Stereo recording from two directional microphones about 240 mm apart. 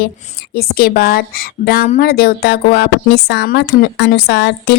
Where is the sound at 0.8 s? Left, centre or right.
Left.